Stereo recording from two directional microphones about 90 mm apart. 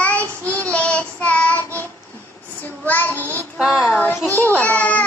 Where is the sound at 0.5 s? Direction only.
15° left (ahead or behind).